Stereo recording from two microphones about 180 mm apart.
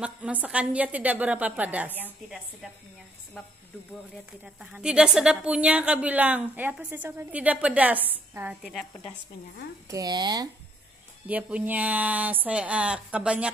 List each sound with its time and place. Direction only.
0.0 s a woman's voice: 5° right (ahead or behind)
4.6 s a woman's voice: 5° right (ahead or behind)
9.8 s speech: 20° right (ahead or behind)
11.2 s a woman's voice: 10° right (ahead or behind)